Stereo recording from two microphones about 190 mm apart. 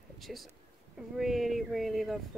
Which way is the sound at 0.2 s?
Centre (ahead or behind).